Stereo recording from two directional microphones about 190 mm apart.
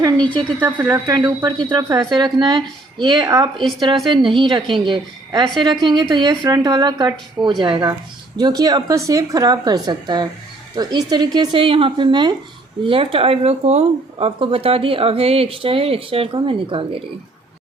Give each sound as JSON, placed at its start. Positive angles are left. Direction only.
{"t": 0.6, "sound": "speech", "side_deg": -10}